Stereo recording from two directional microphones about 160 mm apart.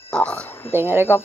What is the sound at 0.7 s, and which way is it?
Speech, 15° right (ahead or behind).